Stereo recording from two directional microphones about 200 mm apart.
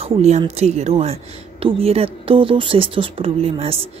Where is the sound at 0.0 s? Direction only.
30° right (ahead or behind).